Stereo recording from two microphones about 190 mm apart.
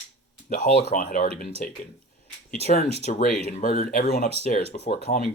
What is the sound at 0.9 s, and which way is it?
Speech, 45° left (ahead or behind).